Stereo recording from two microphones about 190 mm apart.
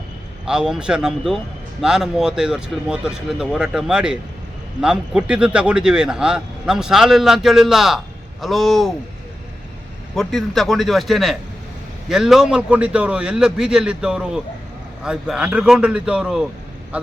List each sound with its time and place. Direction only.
0.4 s speech: 5° right (ahead or behind)
10.2 s a man's voice: centre (ahead or behind)